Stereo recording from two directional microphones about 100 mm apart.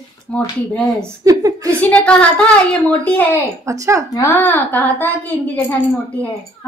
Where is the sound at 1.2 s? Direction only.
35° right (ahead or behind).